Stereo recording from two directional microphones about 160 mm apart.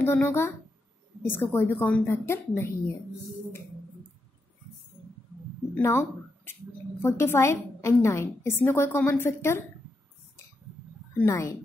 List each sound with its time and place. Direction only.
0.0 s a woman's voice: 15° left (ahead or behind)
5.8 s a woman's voice: 15° left (ahead or behind)
11.1 s a woman's voice: 15° left (ahead or behind)